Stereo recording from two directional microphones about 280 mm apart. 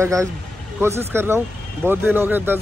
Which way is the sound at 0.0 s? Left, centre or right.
Centre.